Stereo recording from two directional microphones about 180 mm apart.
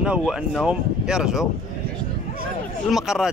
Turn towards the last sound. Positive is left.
turn(degrees=0)  # may be behind; listen again after turning